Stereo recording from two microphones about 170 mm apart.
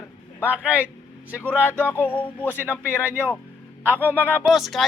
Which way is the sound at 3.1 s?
10° right (ahead or behind).